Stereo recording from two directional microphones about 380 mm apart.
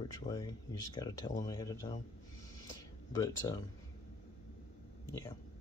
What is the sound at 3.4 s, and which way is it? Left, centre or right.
Speech, centre.